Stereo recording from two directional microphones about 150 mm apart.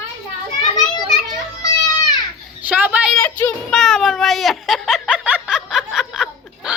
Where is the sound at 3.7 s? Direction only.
Centre (ahead or behind).